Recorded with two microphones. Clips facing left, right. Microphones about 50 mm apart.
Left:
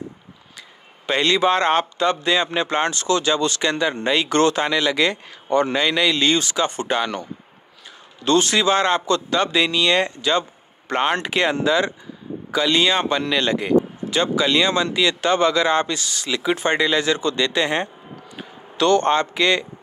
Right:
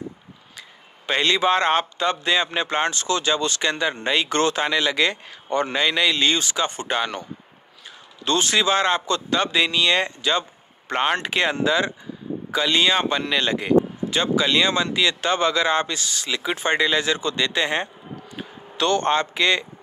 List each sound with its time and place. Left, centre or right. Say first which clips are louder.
1.0 s a man's voice: left 2 dB; right
8.3 s a man's voice: left 3 dB; right
19.0 s speech: left 2 dB; right